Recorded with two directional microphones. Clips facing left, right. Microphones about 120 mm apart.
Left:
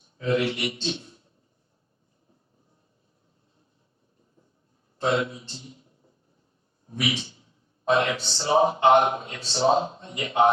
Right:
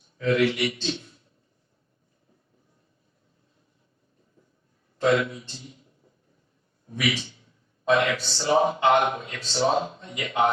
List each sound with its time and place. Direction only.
0.2 s a man's voice: 25° left (ahead or behind)
4.9 s a man's voice: 25° left (ahead or behind)
7.9 s a man's voice: 25° left (ahead or behind)